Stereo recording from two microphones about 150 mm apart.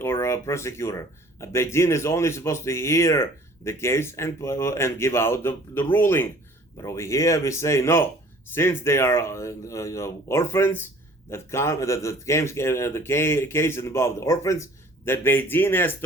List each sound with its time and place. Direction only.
0.0 s speech: 15° left (ahead or behind)